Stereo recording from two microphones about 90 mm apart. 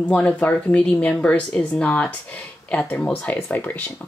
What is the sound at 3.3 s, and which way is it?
Speech, 25° left (ahead or behind).